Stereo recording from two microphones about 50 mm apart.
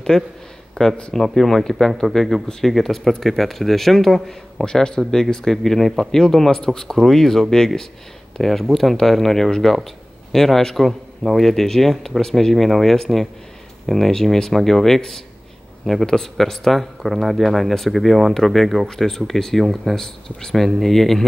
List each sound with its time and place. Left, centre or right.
0.1 s speech: centre